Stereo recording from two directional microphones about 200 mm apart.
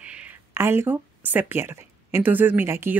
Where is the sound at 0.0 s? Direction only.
5° right (ahead or behind).